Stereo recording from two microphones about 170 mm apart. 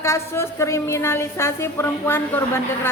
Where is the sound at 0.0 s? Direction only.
15° left (ahead or behind).